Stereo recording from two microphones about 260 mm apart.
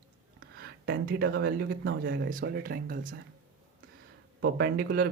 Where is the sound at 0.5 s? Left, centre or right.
Right.